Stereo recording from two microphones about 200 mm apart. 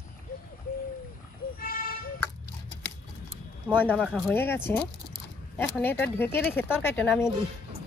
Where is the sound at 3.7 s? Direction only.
10° left (ahead or behind).